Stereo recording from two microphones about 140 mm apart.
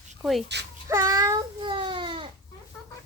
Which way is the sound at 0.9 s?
25° right (ahead or behind).